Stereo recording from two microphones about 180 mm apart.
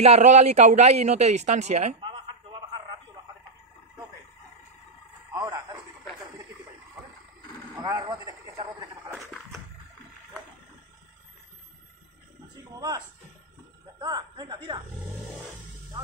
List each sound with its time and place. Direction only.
0.0 s speech: 40° right (ahead or behind)
2.0 s a sound: 25° right (ahead or behind)
5.3 s radio: 20° right (ahead or behind)
7.7 s a sound: 20° right (ahead or behind)
12.7 s music: 20° right (ahead or behind)
13.9 s speech: 25° right (ahead or behind)